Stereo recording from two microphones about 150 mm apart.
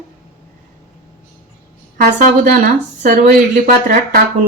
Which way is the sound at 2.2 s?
70° right (ahead or behind).